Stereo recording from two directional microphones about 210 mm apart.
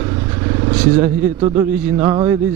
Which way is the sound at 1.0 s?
15° right (ahead or behind).